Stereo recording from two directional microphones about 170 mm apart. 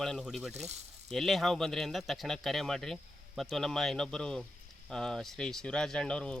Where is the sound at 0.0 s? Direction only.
Centre (ahead or behind).